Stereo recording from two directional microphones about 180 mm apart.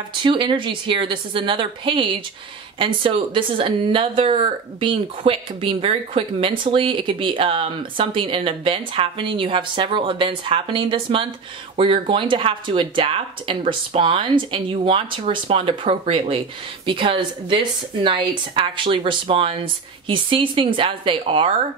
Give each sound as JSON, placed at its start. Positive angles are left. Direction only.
{"t": 0.2, "sound": "speech", "side_deg": -25}